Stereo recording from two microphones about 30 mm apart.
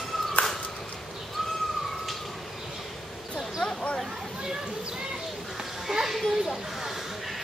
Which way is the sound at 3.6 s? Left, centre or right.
Left.